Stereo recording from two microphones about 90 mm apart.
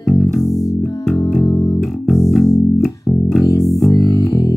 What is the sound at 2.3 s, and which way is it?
Bass guitar, centre (ahead or behind).